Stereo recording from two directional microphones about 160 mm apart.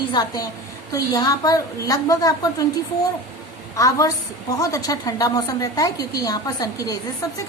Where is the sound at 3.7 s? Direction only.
20° left (ahead or behind).